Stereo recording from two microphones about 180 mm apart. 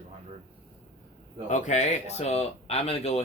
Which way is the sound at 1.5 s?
40° left (ahead or behind).